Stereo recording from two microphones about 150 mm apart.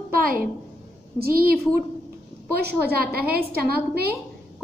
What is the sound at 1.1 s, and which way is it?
A woman's voice, 85° right.